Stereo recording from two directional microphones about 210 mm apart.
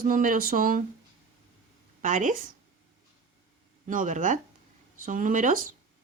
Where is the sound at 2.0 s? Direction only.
40° right (ahead or behind).